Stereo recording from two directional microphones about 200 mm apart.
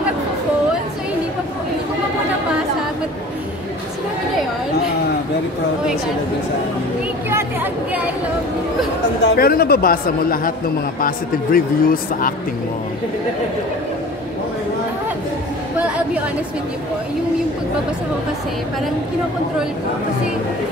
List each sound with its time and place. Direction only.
7.2 s chatter: 10° right (ahead or behind)
9.2 s speech: 55° left (ahead or behind)